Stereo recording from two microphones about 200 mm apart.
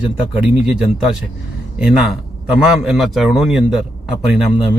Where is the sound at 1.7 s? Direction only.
5° right (ahead or behind).